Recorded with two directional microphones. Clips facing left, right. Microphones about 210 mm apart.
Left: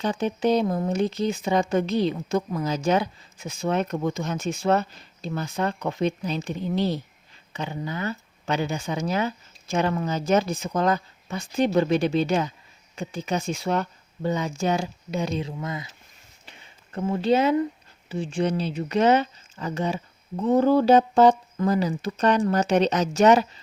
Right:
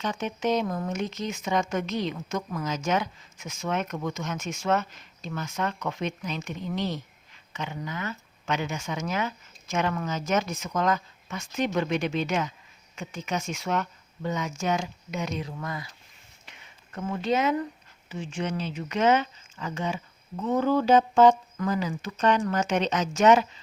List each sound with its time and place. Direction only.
0.0 s speech: 35° left (ahead or behind)
16.5 s speech: 30° left (ahead or behind)